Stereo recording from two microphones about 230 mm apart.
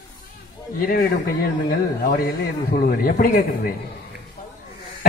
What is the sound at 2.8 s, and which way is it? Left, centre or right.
Speech, left.